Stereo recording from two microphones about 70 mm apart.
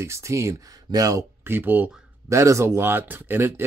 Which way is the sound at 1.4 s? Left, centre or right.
Right.